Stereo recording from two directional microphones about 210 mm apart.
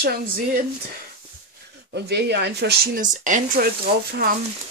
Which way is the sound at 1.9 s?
55° right (ahead or behind).